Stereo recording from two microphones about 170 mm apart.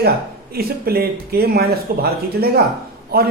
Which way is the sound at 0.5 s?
65° right (ahead or behind).